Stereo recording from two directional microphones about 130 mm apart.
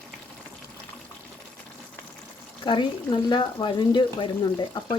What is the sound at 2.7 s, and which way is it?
Speech, 35° left (ahead or behind).